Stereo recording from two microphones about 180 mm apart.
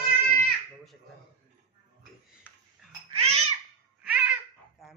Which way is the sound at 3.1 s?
35° right (ahead or behind).